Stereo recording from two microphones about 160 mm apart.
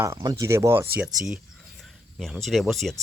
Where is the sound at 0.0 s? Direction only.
20° right (ahead or behind).